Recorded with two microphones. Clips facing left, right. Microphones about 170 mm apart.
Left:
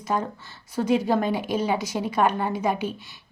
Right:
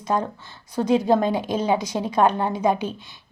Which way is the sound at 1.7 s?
20° right (ahead or behind).